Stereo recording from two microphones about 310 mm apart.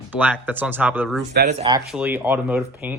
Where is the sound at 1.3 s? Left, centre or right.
Right.